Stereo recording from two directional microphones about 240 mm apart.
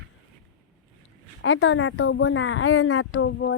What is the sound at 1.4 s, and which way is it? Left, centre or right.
Speech, left.